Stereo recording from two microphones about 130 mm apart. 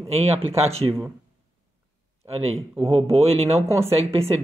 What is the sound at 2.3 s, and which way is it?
Speech, 50° right (ahead or behind).